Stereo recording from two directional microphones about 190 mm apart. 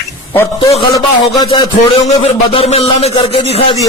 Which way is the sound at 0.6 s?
30° left (ahead or behind).